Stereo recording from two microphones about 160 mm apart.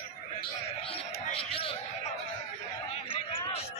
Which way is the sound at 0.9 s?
35° left (ahead or behind).